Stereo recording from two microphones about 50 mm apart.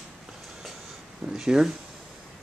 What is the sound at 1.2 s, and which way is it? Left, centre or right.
Speech, centre.